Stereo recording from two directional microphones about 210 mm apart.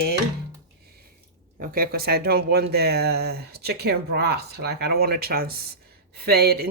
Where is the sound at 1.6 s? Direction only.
45° right (ahead or behind).